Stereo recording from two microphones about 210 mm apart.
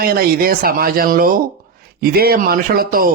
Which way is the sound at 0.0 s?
45° right (ahead or behind).